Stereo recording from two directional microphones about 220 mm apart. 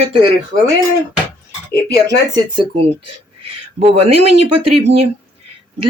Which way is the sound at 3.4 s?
25° right (ahead or behind).